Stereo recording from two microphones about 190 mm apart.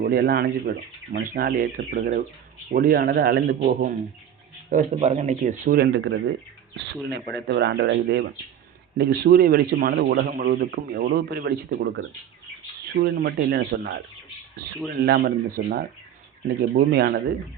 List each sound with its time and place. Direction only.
0.0 s a man's voice: 55° right (ahead or behind)
3.6 s speech: 45° right (ahead or behind); by 6.3 s 70° right (ahead or behind)
7.3 s a man's voice: 65° right (ahead or behind)